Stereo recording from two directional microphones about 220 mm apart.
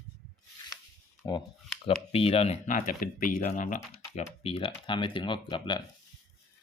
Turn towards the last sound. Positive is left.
turn(degrees=20)  # may be behind; listen again after turning